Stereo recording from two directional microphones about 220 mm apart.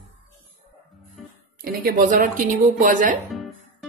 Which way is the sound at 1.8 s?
40° right (ahead or behind).